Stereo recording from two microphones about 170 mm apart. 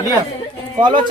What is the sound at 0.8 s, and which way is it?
Speech, 25° right (ahead or behind).